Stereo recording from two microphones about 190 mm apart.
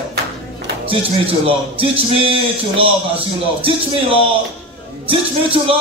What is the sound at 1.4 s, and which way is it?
A man's voice, 30° right (ahead or behind).